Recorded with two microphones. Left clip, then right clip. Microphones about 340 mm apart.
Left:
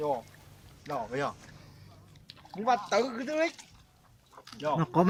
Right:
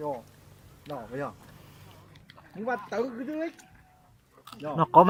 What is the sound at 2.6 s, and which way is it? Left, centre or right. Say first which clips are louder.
Speech: left 4 dB; left.